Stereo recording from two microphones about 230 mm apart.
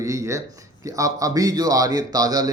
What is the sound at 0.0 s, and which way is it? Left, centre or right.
A man's voice, centre.